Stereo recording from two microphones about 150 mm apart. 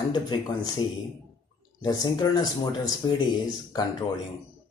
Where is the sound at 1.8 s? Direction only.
25° left (ahead or behind).